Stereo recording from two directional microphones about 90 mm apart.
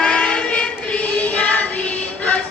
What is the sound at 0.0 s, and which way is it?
Child singing, 10° left (ahead or behind).